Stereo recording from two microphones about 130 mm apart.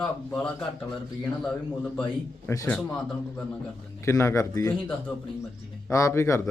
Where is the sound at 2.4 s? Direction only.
25° left (ahead or behind).